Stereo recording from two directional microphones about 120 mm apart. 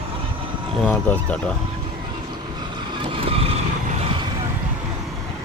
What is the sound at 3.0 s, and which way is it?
Vehicle, 50° right (ahead or behind).